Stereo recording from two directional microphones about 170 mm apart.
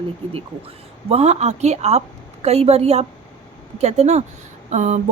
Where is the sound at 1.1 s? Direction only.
40° right (ahead or behind).